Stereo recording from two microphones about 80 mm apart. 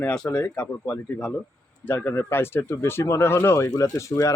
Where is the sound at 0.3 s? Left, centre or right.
Left.